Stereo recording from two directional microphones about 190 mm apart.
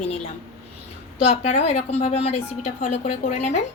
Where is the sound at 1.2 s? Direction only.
35° left (ahead or behind).